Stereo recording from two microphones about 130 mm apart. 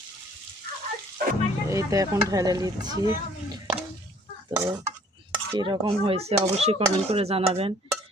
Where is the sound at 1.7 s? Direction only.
25° right (ahead or behind).